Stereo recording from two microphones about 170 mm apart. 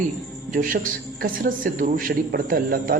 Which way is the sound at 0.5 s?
55° right (ahead or behind).